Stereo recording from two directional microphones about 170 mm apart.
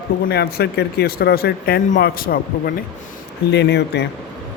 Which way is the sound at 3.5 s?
80° left.